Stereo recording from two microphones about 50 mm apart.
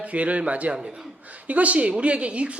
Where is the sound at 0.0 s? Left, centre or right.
Right.